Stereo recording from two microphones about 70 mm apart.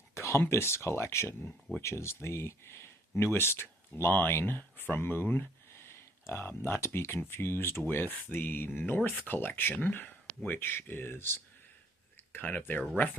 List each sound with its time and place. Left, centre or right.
0.1 s speech: left
1.5 s speech: centre
1.8 s speech: left
12.3 s speech: left